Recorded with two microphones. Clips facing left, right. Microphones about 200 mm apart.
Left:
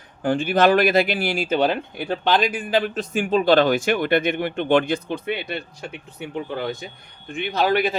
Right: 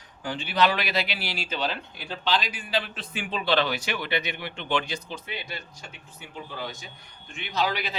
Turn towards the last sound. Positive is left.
turn(degrees=50)  # may be behind; listen again after turning